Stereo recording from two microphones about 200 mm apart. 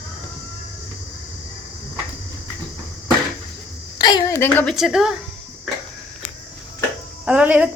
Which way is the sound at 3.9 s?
20° left (ahead or behind).